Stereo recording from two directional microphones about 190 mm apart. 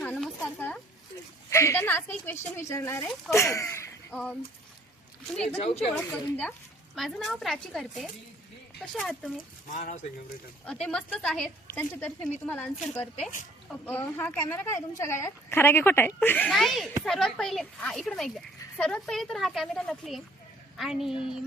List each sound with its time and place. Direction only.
0.0 s a sound: 10° left (ahead or behind)
1.5 s a woman's voice: 15° left (ahead or behind)
5.6 s speech: 35° left (ahead or behind)
6.1 s a woman's voice: 10° left (ahead or behind)
9.6 s speech: 40° left (ahead or behind)
10.7 s a woman's voice: 5° left (ahead or behind)